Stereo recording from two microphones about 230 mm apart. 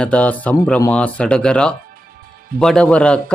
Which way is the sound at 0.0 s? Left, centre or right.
Centre.